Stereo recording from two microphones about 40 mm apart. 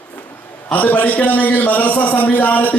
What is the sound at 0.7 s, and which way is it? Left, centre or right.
A man's voice, left.